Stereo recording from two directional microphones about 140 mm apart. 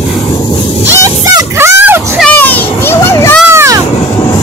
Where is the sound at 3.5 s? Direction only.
20° right (ahead or behind).